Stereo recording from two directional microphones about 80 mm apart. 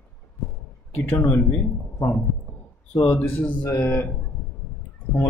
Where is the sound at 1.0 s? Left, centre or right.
Left.